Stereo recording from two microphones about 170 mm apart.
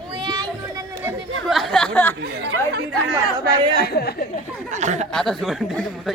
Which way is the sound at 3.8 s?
70° left (ahead or behind).